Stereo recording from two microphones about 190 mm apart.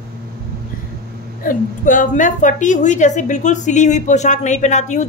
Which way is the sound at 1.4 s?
45° left (ahead or behind).